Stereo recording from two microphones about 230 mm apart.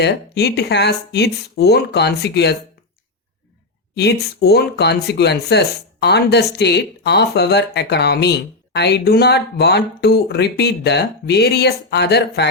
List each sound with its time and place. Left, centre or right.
0.0 s speech: left
3.9 s speech: left